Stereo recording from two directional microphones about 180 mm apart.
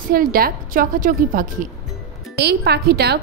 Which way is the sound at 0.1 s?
55° right (ahead or behind).